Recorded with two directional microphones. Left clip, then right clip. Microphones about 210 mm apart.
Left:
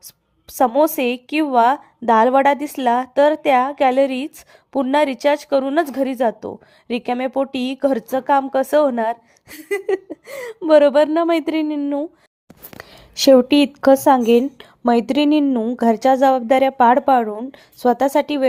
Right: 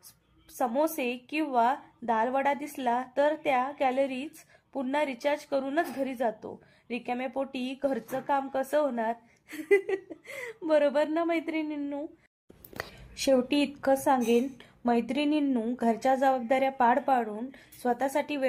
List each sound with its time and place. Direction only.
0.4 s a woman's voice: 40° left (ahead or behind)
12.8 s a sound: centre (ahead or behind)
13.2 s a woman's voice: 45° left (ahead or behind)